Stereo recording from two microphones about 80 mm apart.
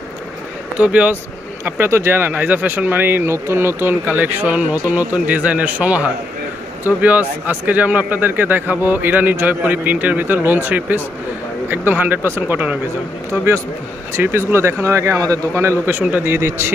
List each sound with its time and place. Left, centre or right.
0.7 s speech: centre
1.8 s speech: right
14.1 s speech: right
15.5 s speech: right